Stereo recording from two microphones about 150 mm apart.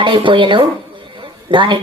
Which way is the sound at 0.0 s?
35° right (ahead or behind).